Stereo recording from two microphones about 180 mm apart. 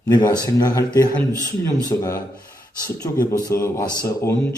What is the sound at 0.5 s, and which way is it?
A man's voice, 20° left (ahead or behind).